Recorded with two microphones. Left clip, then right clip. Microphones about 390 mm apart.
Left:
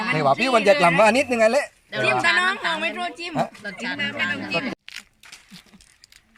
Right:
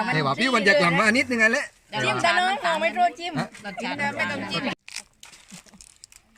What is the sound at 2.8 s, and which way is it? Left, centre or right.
Speech, centre.